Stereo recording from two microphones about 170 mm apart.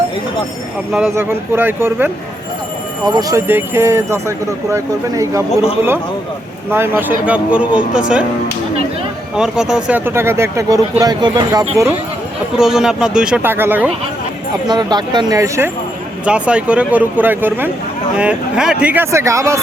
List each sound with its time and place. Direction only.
0.9 s speech: 10° right (ahead or behind)
3.1 s speech: 20° right (ahead or behind)
6.7 s speech: 15° right (ahead or behind)
9.3 s speech: 5° right (ahead or behind); by 11.9 s 20° right (ahead or behind)
12.5 s speech: 5° right (ahead or behind)
14.7 s speech: 25° right (ahead or behind)
16.2 s speech: 5° right (ahead or behind)